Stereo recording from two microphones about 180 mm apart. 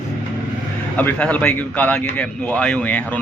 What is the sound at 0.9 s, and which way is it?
A man's voice, 10° left (ahead or behind).